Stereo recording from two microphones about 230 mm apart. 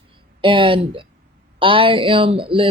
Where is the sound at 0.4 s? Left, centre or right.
Right.